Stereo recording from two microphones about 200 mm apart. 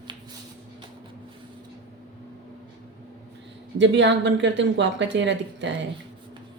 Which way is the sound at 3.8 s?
65° right (ahead or behind).